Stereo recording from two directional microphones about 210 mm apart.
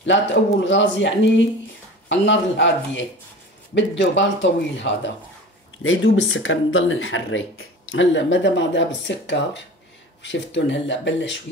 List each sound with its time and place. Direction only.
0.0 s speech: 60° left (ahead or behind)